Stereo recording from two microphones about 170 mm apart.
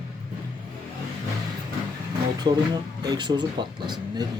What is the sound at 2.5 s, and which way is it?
Speech, 40° right (ahead or behind).